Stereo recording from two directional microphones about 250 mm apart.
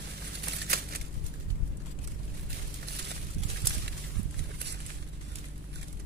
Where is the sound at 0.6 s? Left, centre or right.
Right.